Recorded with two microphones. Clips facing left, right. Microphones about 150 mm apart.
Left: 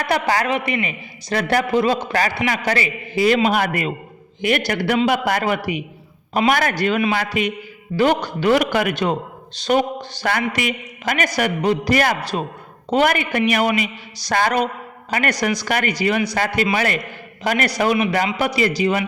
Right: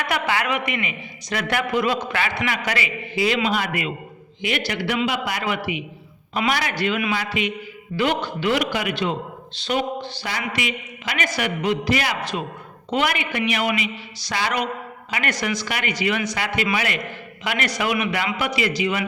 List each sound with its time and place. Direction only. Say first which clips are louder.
0.0 s a woman's voice: left 4 dB; 40° left (ahead or behind)